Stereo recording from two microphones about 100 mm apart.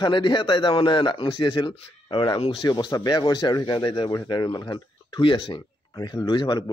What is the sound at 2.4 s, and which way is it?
Speech, 65° left (ahead or behind).